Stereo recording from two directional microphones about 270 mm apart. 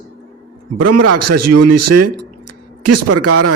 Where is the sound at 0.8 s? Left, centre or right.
Right.